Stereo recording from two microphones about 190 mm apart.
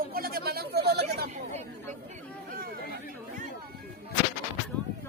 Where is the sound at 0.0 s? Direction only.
50° right (ahead or behind).